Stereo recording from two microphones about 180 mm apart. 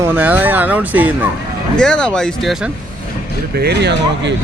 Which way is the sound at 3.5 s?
65° right (ahead or behind).